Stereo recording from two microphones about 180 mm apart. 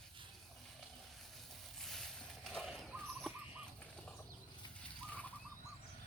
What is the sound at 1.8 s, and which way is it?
Boat, centre (ahead or behind).